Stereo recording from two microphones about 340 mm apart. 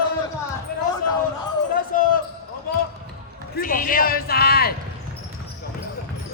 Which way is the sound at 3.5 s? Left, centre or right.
Left.